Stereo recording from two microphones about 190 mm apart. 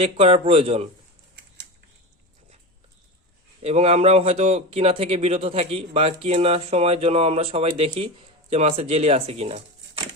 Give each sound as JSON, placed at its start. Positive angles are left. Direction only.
{"t": 0.0, "sound": "speech", "side_deg": -30}
{"t": 3.6, "sound": "speech", "side_deg": -35}